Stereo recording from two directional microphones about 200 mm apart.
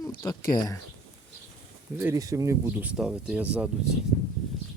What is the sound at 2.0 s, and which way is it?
Speech, 15° right (ahead or behind).